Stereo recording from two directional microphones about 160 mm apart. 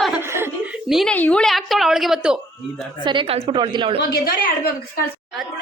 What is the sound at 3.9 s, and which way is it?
A woman's voice, 80° left.